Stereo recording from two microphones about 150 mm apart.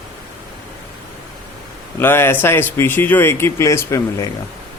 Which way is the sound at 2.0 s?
15° left (ahead or behind).